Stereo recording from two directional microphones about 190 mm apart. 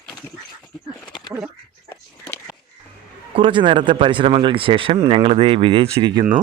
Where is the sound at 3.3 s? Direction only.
25° right (ahead or behind).